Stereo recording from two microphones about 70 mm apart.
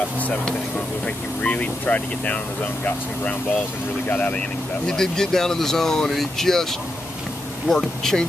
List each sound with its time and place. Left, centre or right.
1.0 s speech: centre